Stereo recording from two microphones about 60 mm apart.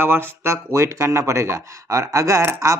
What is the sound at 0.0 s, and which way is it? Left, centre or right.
Speech, right.